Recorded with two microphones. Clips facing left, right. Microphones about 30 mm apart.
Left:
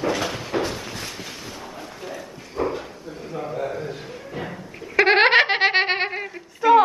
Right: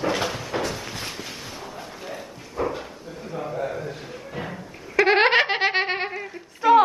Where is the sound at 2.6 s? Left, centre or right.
Centre.